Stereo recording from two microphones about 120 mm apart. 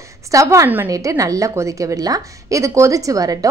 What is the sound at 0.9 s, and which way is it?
A woman's voice, 25° right (ahead or behind).